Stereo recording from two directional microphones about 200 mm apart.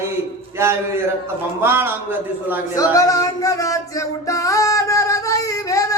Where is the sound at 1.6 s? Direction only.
10° right (ahead or behind).